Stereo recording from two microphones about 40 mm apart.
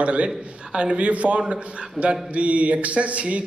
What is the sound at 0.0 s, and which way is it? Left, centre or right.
A man's voice, right.